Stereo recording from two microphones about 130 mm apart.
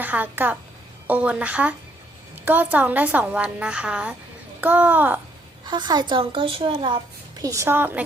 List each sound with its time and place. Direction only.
0.0 s a woman's voice: 15° right (ahead or behind)
5.6 s a woman's voice: 35° right (ahead or behind)
7.3 s a woman's voice: 25° right (ahead or behind)